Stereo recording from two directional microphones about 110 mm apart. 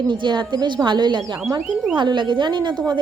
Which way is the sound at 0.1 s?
45° right (ahead or behind).